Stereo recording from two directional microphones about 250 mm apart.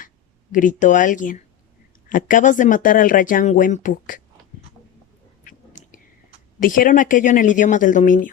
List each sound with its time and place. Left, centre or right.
0.5 s speech: left
5.5 s a sound: left
6.6 s speech: left